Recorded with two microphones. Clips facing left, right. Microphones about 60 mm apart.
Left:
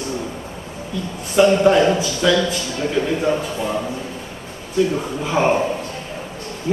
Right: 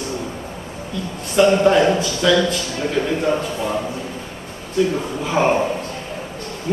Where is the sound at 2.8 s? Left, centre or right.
Centre.